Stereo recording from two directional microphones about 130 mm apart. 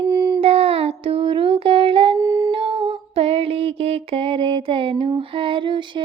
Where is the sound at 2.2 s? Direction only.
25° right (ahead or behind).